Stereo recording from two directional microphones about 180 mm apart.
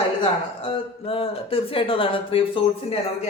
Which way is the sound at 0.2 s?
30° left (ahead or behind).